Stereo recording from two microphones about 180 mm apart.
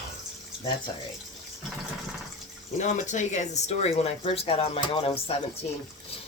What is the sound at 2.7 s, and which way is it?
Speech, 40° left (ahead or behind).